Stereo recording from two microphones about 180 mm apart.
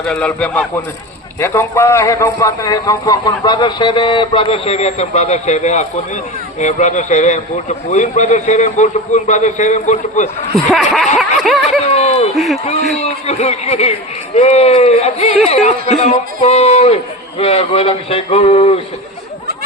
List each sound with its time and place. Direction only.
0.0 s a man's voice: 5° left (ahead or behind); by 10.6 s 40° left (ahead or behind)
11.2 s snicker: centre (ahead or behind)
11.8 s a sound: 35° left (ahead or behind)
12.3 s speech: centre (ahead or behind)
13.0 s a man's voice: 40° left (ahead or behind)